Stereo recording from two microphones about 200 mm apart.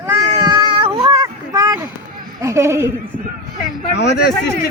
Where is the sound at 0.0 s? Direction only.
15° right (ahead or behind).